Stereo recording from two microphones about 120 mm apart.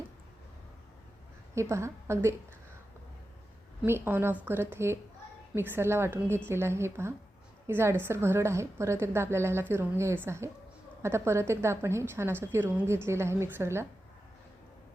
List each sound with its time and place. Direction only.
1.5 s a woman's voice: 25° right (ahead or behind)
3.8 s a woman's voice: 20° right (ahead or behind)